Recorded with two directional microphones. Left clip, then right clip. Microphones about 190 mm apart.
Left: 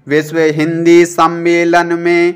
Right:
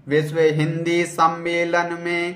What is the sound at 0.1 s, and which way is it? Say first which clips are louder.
Mantra: left 6 dB; 45° left (ahead or behind).